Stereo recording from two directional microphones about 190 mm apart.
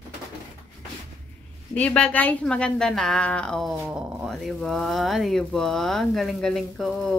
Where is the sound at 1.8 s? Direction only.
5° left (ahead or behind).